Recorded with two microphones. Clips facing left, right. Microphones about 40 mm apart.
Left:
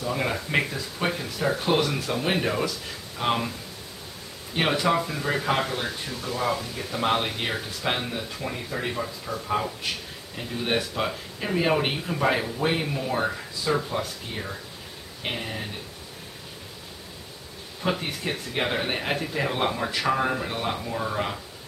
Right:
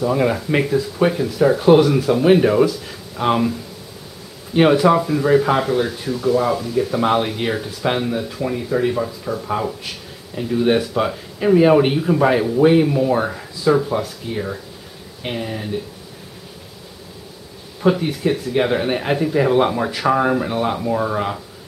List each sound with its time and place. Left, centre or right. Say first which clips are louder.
0.0 s speech: right 9 dB; centre
4.6 s speech: right 10 dB; centre
17.8 s speech: right 10 dB; centre
20.8 s speech: right 9 dB; right